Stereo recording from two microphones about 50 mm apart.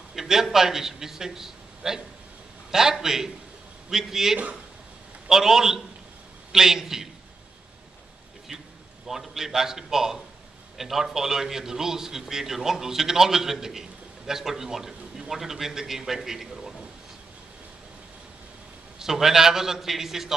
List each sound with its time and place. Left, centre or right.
0.1 s a man's voice: centre
8.5 s a sound: right
9.0 s a man's voice: centre
18.9 s a man's voice: centre